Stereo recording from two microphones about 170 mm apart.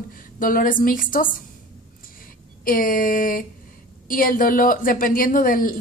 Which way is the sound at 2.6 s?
55° left (ahead or behind).